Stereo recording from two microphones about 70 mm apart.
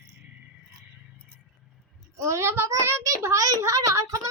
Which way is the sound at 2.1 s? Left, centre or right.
Right.